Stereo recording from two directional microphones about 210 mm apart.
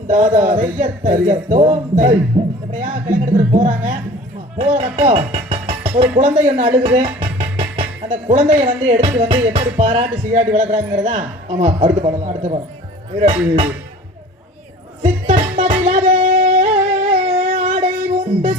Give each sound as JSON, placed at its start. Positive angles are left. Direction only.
{"t": 0.1, "sound": "speech", "side_deg": -35}
{"t": 15.0, "sound": "music", "side_deg": -35}